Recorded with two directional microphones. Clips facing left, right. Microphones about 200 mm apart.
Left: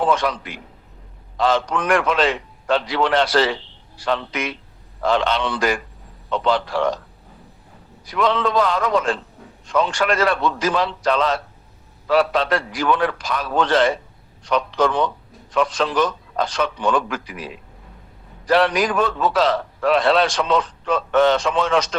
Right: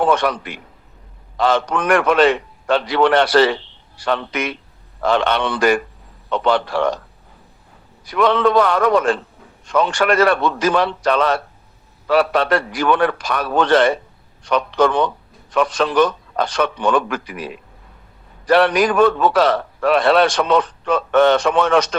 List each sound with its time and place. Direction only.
0.0 s a man's voice: 65° right (ahead or behind)
1.4 s a man's voice: 65° right (ahead or behind)
8.1 s a man's voice: 60° right (ahead or behind)